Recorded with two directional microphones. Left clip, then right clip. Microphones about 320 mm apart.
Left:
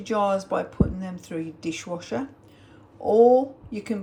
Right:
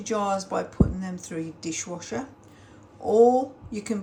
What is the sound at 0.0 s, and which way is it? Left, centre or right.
Speech, centre.